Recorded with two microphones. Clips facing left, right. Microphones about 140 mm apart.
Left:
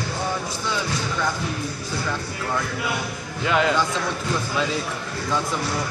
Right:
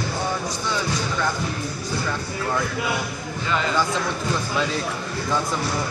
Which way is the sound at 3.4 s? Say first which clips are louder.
Left 4 dB; 70° left (ahead or behind).